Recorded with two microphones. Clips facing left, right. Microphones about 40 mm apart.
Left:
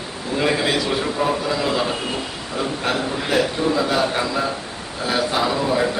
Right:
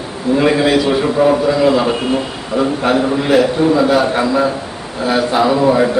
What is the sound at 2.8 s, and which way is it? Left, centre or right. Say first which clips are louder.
A man's voice: right 8 dB; centre.